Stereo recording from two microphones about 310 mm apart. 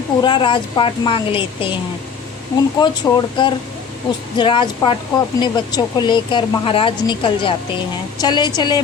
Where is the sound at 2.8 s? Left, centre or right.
Centre.